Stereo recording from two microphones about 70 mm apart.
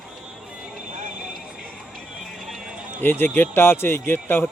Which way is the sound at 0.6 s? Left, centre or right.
Centre.